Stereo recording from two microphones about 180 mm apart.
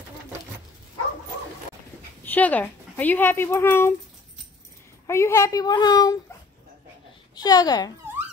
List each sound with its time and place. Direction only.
2.2 s speech: 10° left (ahead or behind)
5.0 s a woman's voice: 15° left (ahead or behind)
7.3 s a woman's voice: 20° left (ahead or behind)